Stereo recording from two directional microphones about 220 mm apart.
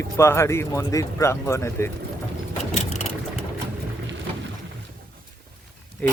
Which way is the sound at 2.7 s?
30° left (ahead or behind).